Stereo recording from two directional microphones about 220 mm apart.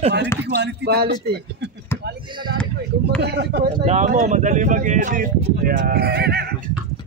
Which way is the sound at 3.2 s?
50° right (ahead or behind).